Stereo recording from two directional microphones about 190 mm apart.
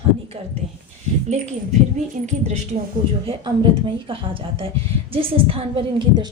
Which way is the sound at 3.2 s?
25° right (ahead or behind).